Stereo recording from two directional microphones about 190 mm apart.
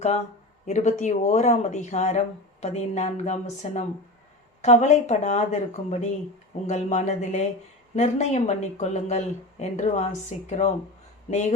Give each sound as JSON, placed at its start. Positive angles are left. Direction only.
{"t": 0.6, "sound": "speech", "side_deg": 40}